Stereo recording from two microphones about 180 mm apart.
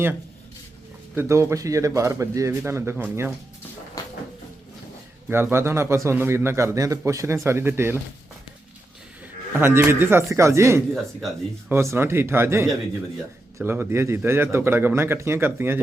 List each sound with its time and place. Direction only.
1.1 s a man's voice: 15° right (ahead or behind)
4.0 s a sound: 20° left (ahead or behind)
5.3 s a man's voice: 10° right (ahead or behind)
9.2 s a man's voice: 15° right (ahead or behind)